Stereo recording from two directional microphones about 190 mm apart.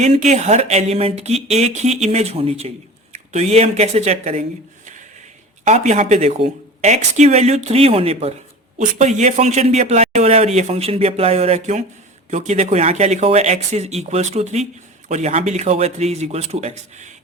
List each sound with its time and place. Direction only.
0.0 s speech: 40° right (ahead or behind)
5.6 s speech: 40° right (ahead or behind)